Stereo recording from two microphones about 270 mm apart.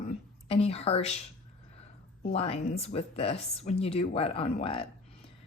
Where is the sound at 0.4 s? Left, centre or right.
Left.